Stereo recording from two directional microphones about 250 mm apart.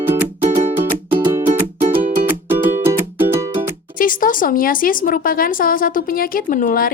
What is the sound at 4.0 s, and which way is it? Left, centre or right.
A woman's voice, left.